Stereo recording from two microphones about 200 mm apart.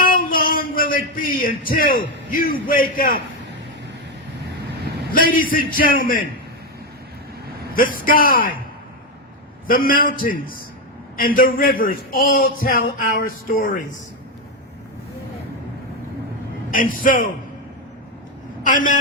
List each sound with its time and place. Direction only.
0.0 s music: 45° left (ahead or behind)
5.1 s a man's voice: 45° left (ahead or behind)
7.8 s a man's voice: 45° left (ahead or behind)
9.6 s a man's voice: 45° left (ahead or behind)
17.0 s a man's voice: 45° left (ahead or behind)
18.6 s a man's voice: 40° left (ahead or behind)